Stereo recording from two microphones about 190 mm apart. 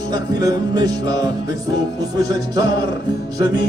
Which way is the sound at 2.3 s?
20° right (ahead or behind).